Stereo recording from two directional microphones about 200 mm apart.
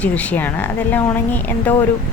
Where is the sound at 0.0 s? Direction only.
5° left (ahead or behind).